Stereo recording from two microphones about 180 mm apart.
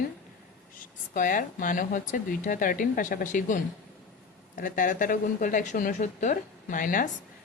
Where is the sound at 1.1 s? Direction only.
50° left (ahead or behind).